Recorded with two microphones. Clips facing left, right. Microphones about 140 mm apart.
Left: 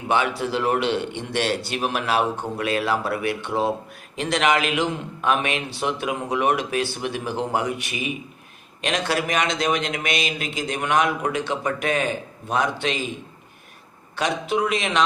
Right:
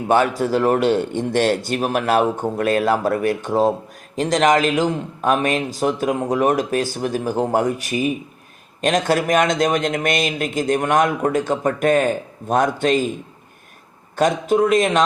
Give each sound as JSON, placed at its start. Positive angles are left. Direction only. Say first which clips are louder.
{"t": 0.1, "sound": "a man's voice", "louder": "right 5 dB", "side_deg": -45}
{"t": 14.2, "sound": "a man's voice", "louder": "right 6 dB", "side_deg": -45}